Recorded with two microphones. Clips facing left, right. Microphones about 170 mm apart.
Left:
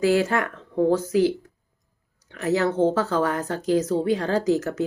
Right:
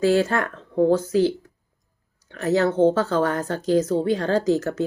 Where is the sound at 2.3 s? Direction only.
15° left (ahead or behind).